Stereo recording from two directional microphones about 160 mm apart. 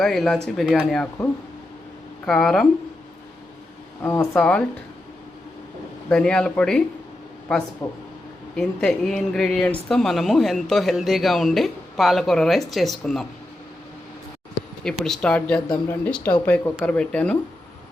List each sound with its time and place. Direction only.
0.0 s speech: centre (ahead or behind)
4.0 s speech: 15° left (ahead or behind)
6.1 s speech: 5° left (ahead or behind)
7.8 s speech: 25° left (ahead or behind)
8.5 s speech: 5° left (ahead or behind)
14.8 s speech: 5° left (ahead or behind)